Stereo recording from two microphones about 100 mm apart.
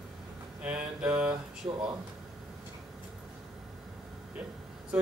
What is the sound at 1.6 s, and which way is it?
Speech, 25° right (ahead or behind).